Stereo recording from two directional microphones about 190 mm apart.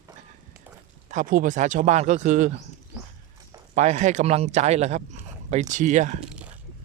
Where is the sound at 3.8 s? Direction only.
40° right (ahead or behind).